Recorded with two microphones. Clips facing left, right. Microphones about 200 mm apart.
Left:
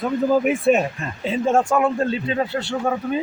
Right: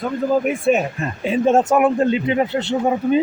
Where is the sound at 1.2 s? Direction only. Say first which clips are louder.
Right 3 dB; 15° right (ahead or behind).